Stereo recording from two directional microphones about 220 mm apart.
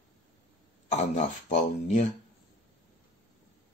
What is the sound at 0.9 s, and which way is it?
Speech, 30° left (ahead or behind).